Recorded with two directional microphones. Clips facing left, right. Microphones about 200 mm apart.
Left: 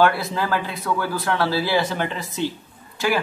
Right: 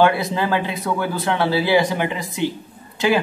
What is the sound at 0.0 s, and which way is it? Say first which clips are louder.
A man's voice: right 2 dB; 20° right (ahead or behind).